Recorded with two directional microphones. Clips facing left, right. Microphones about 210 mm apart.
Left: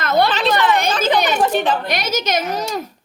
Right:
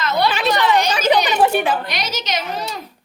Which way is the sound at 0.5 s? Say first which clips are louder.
Even; 55° left (ahead or behind).